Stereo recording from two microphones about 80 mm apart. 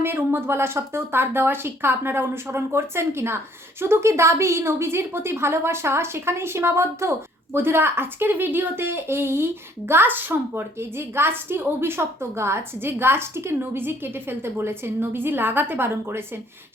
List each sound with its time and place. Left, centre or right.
0.0 s speech: right